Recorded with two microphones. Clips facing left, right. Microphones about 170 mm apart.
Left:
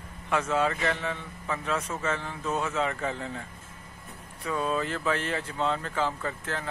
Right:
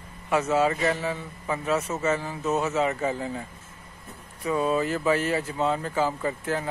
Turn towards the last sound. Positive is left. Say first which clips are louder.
# right 6 dB
turn(degrees=-10)  # may be behind; listen again after turning